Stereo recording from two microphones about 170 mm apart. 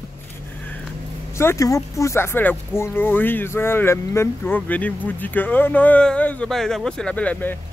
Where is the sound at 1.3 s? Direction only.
15° left (ahead or behind).